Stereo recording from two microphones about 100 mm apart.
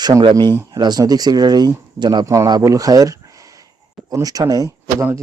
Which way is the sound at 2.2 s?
30° right (ahead or behind).